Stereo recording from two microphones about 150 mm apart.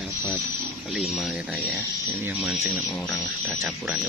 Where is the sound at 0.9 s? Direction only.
Centre (ahead or behind).